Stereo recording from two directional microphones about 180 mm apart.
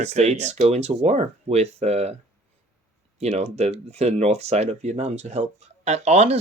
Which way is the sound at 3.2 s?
35° right (ahead or behind).